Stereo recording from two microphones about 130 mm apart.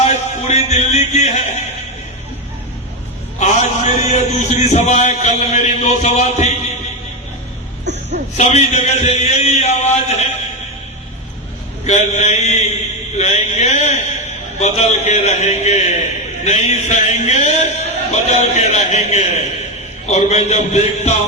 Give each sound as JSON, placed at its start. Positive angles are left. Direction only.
{"t": 0.0, "sound": "music", "side_deg": 60}
{"t": 3.4, "sound": "a man's voice", "side_deg": 60}
{"t": 8.4, "sound": "a man's voice", "side_deg": 65}
{"t": 11.9, "sound": "a man's voice", "side_deg": 60}